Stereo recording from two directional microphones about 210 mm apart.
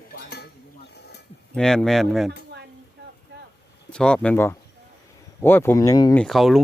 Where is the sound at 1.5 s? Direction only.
5° left (ahead or behind).